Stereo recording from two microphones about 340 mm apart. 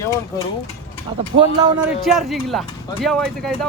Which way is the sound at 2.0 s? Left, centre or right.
Centre.